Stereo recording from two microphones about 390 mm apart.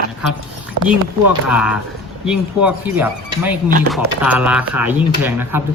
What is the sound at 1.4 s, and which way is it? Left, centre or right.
Speech, centre.